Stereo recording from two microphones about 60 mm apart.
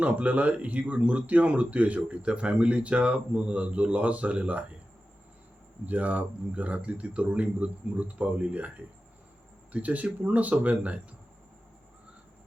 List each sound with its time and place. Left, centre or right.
0.0 s speech: right
5.8 s speech: right
9.7 s speech: right